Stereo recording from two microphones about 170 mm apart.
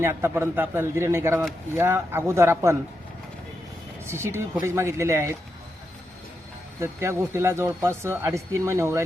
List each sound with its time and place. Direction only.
0.0 s speech: 15° right (ahead or behind)
4.0 s speech: 15° right (ahead or behind)
6.7 s speech: 15° right (ahead or behind)